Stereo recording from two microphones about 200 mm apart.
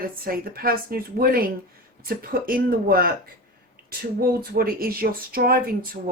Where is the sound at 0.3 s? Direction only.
50° right (ahead or behind).